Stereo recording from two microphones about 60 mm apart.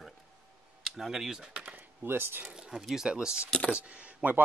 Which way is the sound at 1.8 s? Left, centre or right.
Right.